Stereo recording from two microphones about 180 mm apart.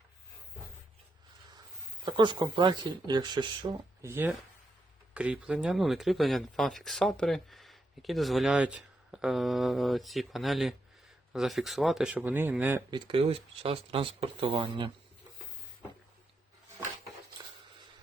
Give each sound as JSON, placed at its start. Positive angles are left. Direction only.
{"t": 2.0, "sound": "speech", "side_deg": -25}
{"t": 4.0, "sound": "speech", "side_deg": -15}
{"t": 12.9, "sound": "speech", "side_deg": -25}